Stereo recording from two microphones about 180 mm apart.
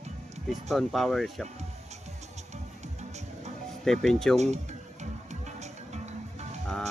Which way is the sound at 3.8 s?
Centre (ahead or behind).